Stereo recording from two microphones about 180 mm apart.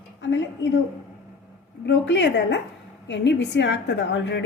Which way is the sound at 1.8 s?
80° left.